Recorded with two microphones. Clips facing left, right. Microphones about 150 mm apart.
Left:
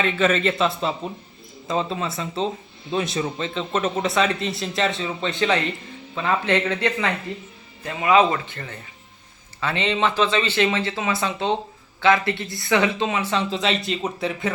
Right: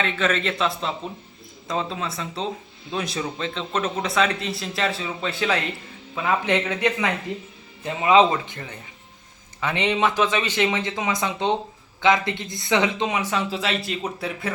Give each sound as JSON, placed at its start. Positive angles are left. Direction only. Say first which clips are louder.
{"t": 0.0, "sound": "speech", "louder": "left 3 dB", "side_deg": 5}